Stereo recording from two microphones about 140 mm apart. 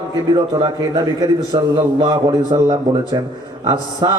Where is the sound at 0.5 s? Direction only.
25° right (ahead or behind).